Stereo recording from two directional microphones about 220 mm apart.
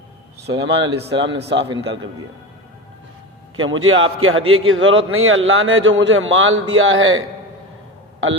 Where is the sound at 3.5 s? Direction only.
65° right (ahead or behind).